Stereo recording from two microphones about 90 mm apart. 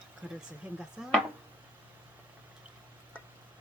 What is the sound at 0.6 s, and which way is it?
Chopping, 15° right (ahead or behind).